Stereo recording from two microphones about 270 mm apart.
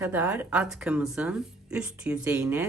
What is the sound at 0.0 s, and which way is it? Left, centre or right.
Speech, centre.